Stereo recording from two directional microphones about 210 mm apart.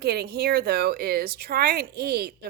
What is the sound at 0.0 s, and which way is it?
Speech, 50° right (ahead or behind).